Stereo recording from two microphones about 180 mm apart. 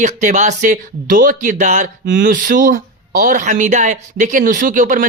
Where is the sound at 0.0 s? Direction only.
40° right (ahead or behind).